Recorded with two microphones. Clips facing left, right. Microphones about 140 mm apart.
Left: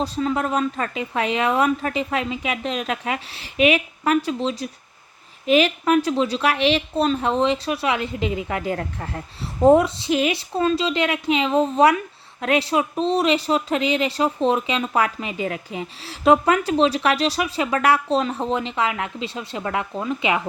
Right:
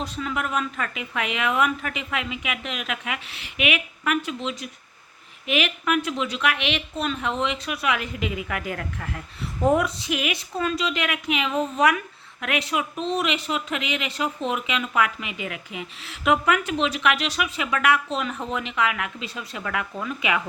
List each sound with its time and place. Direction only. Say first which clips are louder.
0.0 s speech: left 6 dB; 35° left (ahead or behind)